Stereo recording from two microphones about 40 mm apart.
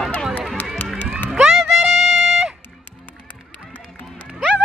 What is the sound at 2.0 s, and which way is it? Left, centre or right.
Music, centre.